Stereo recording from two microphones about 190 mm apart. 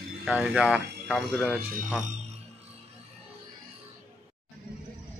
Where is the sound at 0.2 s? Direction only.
5° right (ahead or behind).